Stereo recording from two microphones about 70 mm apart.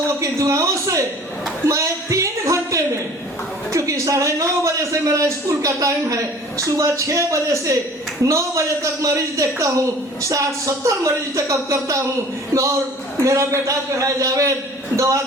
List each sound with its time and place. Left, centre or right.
0.2 s a man's voice: right
1.6 s a sound: right
3.7 s a man's voice: right
13.2 s a man's voice: right